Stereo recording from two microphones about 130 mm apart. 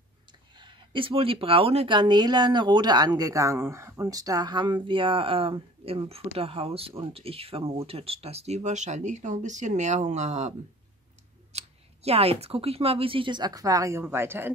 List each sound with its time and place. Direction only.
0.3 s speech: 35° right (ahead or behind)
2.0 s speech: 35° right (ahead or behind); by 10.5 s 65° right (ahead or behind)
11.5 s speech: 50° right (ahead or behind); by 14.5 s 15° right (ahead or behind)